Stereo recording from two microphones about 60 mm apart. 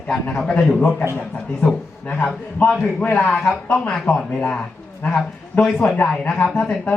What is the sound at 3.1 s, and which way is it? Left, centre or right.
Speech, left.